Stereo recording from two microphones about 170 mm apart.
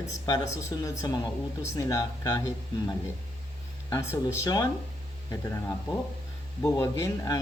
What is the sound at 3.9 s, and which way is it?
Speech, 15° left (ahead or behind).